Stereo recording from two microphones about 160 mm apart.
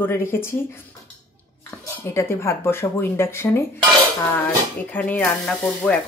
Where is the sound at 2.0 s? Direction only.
15° left (ahead or behind).